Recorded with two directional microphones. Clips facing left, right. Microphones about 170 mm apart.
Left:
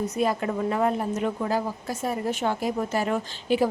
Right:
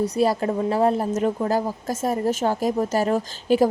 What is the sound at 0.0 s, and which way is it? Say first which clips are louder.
A woman's voice: right 4 dB; 35° right (ahead or behind).